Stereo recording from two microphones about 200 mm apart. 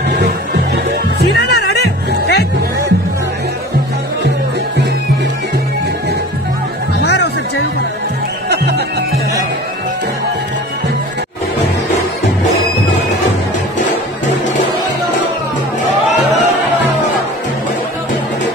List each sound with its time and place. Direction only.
1.2 s music: 55° left (ahead or behind)
7.0 s music: 55° left (ahead or behind)
8.5 s music: 55° right (ahead or behind)